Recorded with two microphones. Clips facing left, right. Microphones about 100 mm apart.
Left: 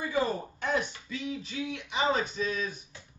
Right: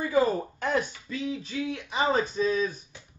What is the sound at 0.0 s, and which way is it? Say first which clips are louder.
Speech: right 5 dB; 45° right (ahead or behind).